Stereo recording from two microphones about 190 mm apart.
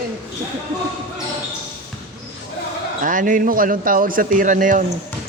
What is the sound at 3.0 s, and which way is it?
A man's voice, 45° right (ahead or behind).